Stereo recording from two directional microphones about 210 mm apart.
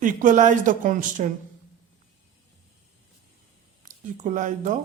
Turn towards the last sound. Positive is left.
turn(degrees=-35)  # may be behind; listen again after turning